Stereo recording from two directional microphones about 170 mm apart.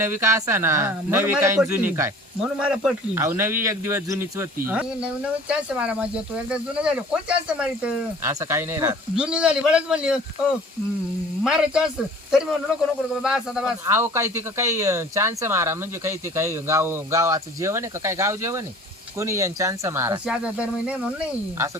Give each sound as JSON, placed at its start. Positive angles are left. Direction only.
{"t": 0.0, "sound": "speech", "side_deg": -15}
{"t": 11.4, "sound": "speech", "side_deg": -5}
{"t": 13.8, "sound": "speech", "side_deg": -15}